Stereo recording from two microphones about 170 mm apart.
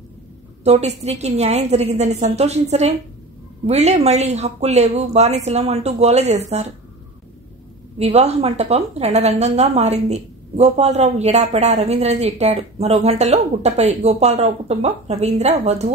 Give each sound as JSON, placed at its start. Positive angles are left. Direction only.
{"t": 0.7, "sound": "speech", "side_deg": -40}
{"t": 8.0, "sound": "speech", "side_deg": -40}